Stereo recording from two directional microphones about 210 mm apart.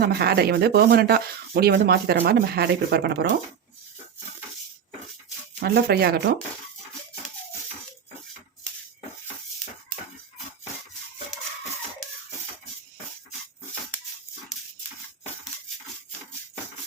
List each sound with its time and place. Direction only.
0.0 s speech: 50° right (ahead or behind)
5.6 s speech: 50° right (ahead or behind)